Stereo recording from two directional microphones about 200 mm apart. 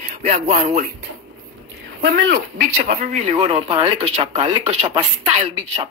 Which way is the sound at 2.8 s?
35° right (ahead or behind).